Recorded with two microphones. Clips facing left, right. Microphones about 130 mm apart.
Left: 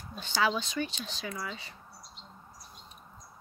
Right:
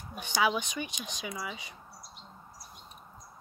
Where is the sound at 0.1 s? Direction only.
15° right (ahead or behind).